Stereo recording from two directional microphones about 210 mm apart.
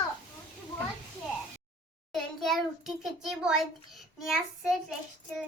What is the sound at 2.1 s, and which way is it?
A child's voice, centre (ahead or behind).